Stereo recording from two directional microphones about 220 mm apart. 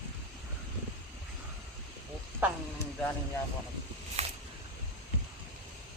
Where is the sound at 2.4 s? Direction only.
5° right (ahead or behind).